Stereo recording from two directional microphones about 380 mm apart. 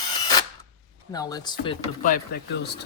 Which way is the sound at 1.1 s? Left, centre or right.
Centre.